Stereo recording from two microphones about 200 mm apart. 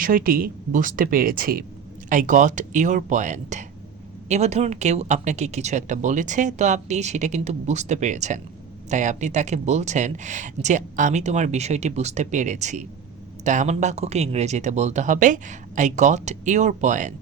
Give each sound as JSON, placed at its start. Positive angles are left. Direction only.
{"t": 0.0, "sound": "speech", "side_deg": -45}